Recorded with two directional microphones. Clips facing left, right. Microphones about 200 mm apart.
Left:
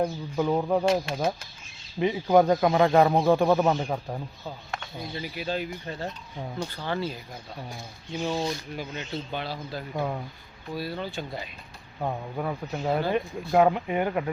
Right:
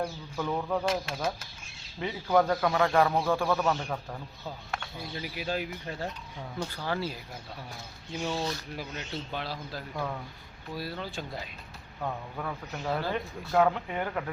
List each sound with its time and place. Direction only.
0.0 s speech: 25° left (ahead or behind)
2.0 s speech: 20° left (ahead or behind)
4.4 s speech: centre (ahead or behind)
8.2 s speech: 15° left (ahead or behind)
8.7 s speech: centre (ahead or behind)
9.9 s speech: 30° left (ahead or behind)
10.8 s speech: centre (ahead or behind)
11.9 s speech: 25° left (ahead or behind)